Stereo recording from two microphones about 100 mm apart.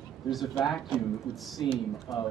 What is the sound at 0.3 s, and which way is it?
A man's voice, centre (ahead or behind).